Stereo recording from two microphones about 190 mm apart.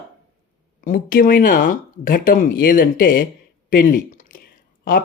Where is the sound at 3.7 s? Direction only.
50° left (ahead or behind).